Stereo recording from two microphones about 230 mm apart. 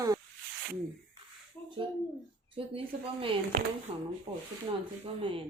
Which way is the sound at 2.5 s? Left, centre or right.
Right.